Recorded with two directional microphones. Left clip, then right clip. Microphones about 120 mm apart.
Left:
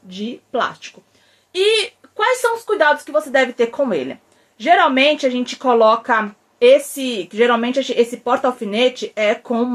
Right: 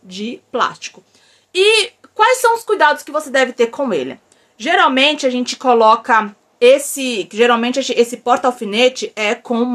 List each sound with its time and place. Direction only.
0.1 s speech: 30° right (ahead or behind)